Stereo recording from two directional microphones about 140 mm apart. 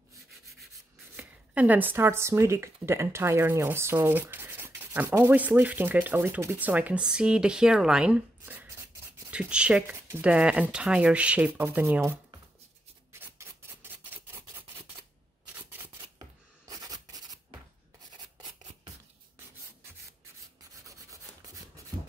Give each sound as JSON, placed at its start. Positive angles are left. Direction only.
{"t": 1.1, "sound": "speech", "side_deg": -10}
{"t": 13.1, "sound": "a sound", "side_deg": -15}
{"t": 15.5, "sound": "shuffling cards", "side_deg": -15}
{"t": 16.6, "sound": "rub", "side_deg": -25}